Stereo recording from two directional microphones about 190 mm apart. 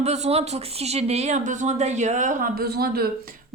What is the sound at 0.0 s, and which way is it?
Speech, 35° right (ahead or behind).